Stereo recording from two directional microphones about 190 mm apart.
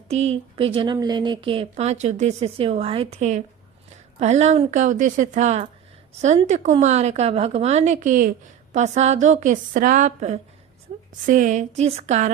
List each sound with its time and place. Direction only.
0.1 s speech: 35° right (ahead or behind)